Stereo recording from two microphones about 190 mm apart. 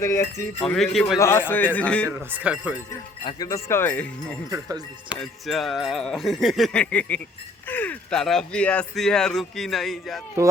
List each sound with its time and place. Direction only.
0.0 s a man's voice: 15° left (ahead or behind)
0.6 s speech: centre (ahead or behind)
1.2 s a man's voice: 10° left (ahead or behind)
2.0 s speech: 10° right (ahead or behind)
3.2 s a man's voice: 20° left (ahead or behind); by 10.2 s centre (ahead or behind)
10.4 s speech: 15° right (ahead or behind)